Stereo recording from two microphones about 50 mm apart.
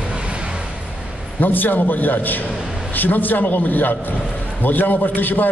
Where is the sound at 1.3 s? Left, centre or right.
Left.